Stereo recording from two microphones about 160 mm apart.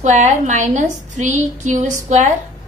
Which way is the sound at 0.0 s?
45° right (ahead or behind).